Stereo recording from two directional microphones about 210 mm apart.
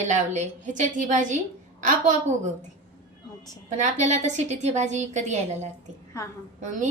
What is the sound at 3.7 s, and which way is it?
A woman's voice, 35° right (ahead or behind).